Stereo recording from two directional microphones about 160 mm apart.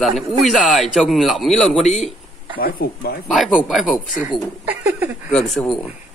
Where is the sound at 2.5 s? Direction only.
65° left (ahead or behind).